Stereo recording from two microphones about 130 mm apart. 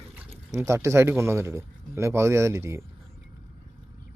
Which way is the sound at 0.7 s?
20° right (ahead or behind).